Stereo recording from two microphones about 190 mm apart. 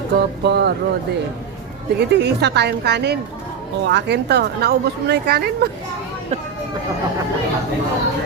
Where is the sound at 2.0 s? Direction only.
65° right (ahead or behind).